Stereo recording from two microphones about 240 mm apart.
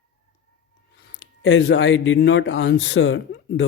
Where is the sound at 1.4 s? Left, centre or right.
Left.